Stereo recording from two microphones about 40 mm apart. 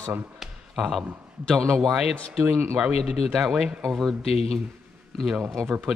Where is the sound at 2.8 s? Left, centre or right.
Centre.